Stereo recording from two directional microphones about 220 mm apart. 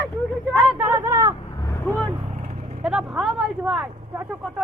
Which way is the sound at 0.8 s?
10° right (ahead or behind).